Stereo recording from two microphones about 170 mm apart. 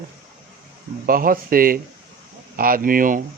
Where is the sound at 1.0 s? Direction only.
55° right (ahead or behind).